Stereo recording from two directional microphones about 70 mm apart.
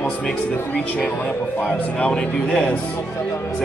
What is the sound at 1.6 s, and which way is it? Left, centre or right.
Speech, centre.